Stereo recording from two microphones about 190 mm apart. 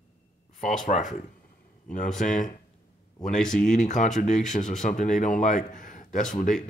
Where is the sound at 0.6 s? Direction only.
40° left (ahead or behind).